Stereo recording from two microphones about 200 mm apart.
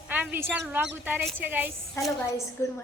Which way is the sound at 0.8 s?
10° right (ahead or behind).